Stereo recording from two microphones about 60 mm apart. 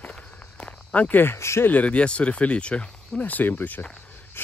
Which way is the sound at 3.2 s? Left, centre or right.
Left.